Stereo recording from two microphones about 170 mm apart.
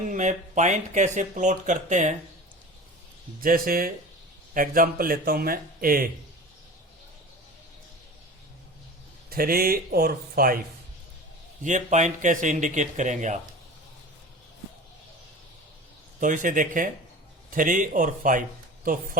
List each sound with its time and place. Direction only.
0.1 s speech: 45° right (ahead or behind)
3.4 s speech: 55° right (ahead or behind)
9.3 s speech: 60° right (ahead or behind)
11.6 s speech: 45° right (ahead or behind)
16.2 s speech: 50° right (ahead or behind)